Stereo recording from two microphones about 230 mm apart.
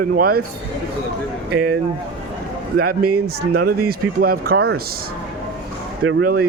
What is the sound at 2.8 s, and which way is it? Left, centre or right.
Speech, right.